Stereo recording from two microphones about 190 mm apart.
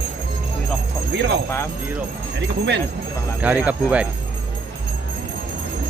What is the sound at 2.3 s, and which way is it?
Speech, 65° right (ahead or behind).